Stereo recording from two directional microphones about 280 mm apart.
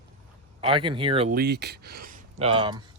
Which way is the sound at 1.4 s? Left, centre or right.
Right.